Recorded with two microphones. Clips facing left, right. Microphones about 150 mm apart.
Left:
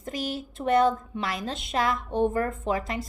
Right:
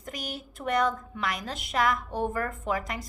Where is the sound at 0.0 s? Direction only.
30° left (ahead or behind).